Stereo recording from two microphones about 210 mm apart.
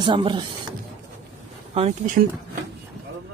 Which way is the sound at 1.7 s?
30° right (ahead or behind).